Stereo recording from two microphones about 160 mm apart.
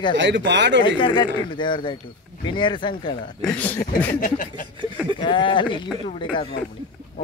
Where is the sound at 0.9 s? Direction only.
30° left (ahead or behind).